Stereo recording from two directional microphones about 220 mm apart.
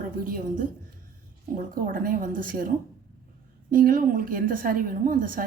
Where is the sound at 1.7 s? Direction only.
40° right (ahead or behind).